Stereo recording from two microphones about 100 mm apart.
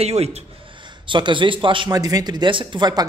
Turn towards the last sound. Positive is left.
turn(degrees=-45)  # may be behind; listen again after turning